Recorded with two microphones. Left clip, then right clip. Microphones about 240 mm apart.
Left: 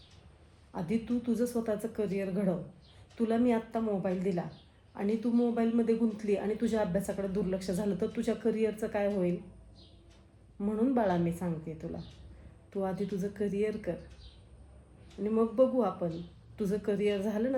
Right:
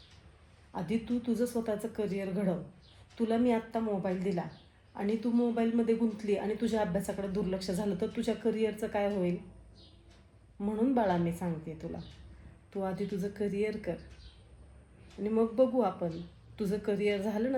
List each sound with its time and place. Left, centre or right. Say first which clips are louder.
0.7 s speech: even; centre
10.6 s speech: even; centre
15.2 s speech: left 1 dB; centre